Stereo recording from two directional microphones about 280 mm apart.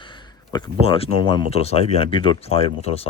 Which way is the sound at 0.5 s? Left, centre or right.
Centre.